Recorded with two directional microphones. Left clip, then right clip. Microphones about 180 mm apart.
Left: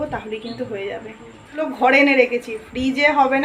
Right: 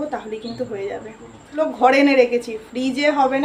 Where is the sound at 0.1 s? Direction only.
5° left (ahead or behind).